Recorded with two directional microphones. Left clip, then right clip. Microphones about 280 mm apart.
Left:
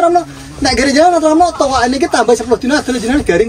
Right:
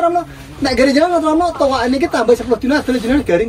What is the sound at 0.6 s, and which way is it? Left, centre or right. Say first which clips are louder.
Speech: left 2 dB; centre.